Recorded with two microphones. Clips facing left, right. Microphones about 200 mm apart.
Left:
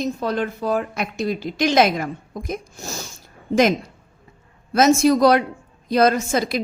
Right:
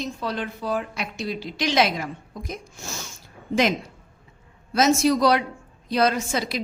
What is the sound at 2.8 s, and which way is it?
Speech, 35° left (ahead or behind).